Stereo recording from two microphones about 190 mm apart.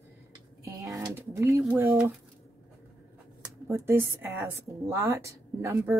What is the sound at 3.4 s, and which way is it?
Speech, 15° right (ahead or behind).